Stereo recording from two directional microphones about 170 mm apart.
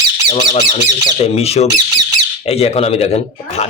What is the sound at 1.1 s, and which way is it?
A man's voice, 35° left (ahead or behind).